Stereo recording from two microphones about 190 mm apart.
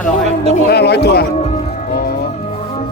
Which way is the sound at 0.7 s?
60° left (ahead or behind).